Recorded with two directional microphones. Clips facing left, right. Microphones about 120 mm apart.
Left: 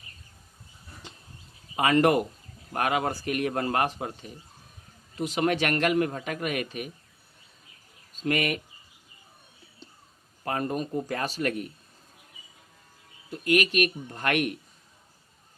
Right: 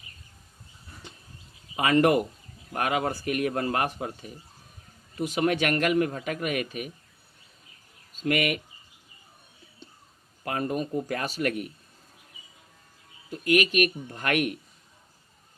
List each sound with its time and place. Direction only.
1.7 s speech: 35° left (ahead or behind)
8.1 s speech: 35° left (ahead or behind)
10.4 s speech: 35° left (ahead or behind)
13.4 s speech: 35° left (ahead or behind)